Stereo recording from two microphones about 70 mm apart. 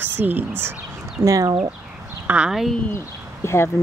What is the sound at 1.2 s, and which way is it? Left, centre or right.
Speech, right.